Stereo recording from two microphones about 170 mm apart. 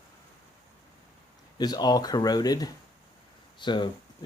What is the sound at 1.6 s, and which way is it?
Speech, 25° left (ahead or behind).